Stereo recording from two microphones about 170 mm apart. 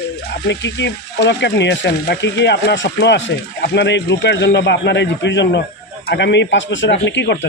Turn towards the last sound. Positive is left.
turn(degrees=90)